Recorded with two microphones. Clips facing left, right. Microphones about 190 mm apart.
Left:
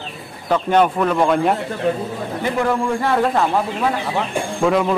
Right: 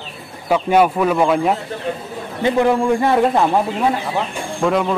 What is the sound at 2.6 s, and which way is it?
A man's voice, 20° right (ahead or behind).